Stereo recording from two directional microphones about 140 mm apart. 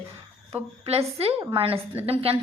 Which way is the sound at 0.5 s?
45° right (ahead or behind).